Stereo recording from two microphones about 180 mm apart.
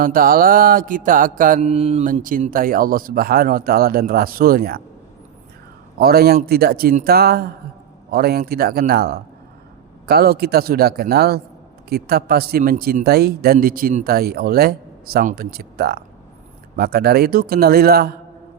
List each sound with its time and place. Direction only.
0.0 s mantra: 50° right (ahead or behind)
6.0 s a man's voice: 60° right (ahead or behind)